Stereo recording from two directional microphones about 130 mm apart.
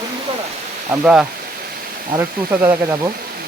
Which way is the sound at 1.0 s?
5° right (ahead or behind).